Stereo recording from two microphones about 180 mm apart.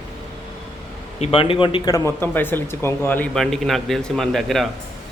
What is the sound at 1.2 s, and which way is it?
Speech, 30° left (ahead or behind).